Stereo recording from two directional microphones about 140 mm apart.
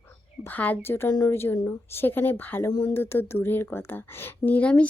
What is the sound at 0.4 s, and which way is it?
Speech, 10° left (ahead or behind).